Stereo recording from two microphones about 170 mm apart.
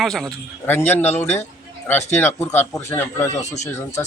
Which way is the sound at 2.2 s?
10° left (ahead or behind).